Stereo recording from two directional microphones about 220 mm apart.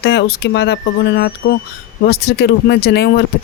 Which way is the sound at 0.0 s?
50° left (ahead or behind).